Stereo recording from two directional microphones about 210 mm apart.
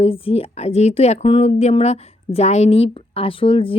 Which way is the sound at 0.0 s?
25° left (ahead or behind).